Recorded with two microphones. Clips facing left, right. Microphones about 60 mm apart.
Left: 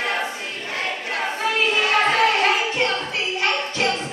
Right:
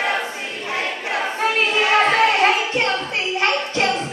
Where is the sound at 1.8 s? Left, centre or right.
Right.